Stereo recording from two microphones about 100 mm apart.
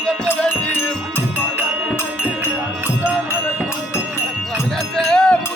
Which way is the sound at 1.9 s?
25° left (ahead or behind).